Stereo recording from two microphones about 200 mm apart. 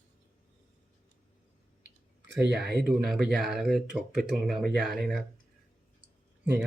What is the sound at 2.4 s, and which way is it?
Speech, 55° right (ahead or behind).